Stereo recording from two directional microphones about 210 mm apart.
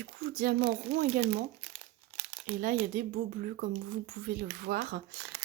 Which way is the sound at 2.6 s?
40° right (ahead or behind).